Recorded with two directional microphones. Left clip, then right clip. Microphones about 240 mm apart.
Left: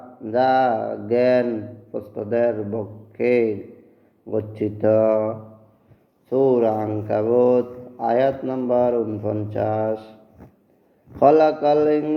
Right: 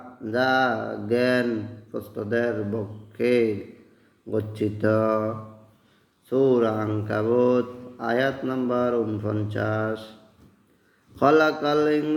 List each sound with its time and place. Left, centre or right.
0.3 s mantra: centre
11.2 s mantra: centre